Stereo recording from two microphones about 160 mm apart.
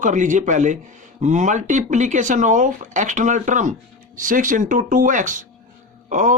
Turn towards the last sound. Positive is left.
turn(degrees=-55)  # may be behind; listen again after turning